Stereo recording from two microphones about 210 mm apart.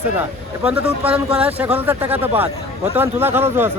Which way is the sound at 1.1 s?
25° right (ahead or behind).